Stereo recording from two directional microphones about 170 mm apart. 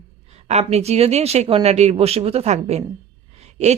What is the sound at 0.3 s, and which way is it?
A woman's voice, 40° right (ahead or behind).